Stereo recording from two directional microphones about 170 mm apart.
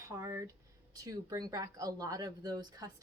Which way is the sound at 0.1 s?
20° right (ahead or behind).